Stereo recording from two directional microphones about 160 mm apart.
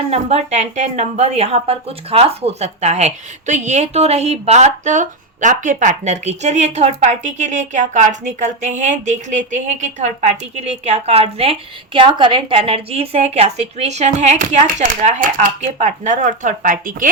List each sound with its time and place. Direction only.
0.1 s a woman's voice: 40° right (ahead or behind); by 17.1 s 60° right (ahead or behind)